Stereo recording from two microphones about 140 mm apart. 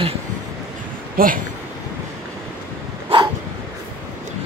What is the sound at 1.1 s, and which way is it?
Speech, 85° right.